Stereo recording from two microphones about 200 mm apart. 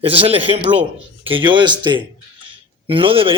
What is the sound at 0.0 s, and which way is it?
A man's voice, 30° right (ahead or behind).